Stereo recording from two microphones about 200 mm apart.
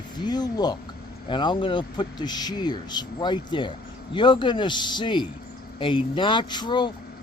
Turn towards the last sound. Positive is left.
turn(degrees=20)  # may be behind; listen again after turning